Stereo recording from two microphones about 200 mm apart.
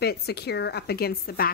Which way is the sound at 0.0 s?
55° left (ahead or behind).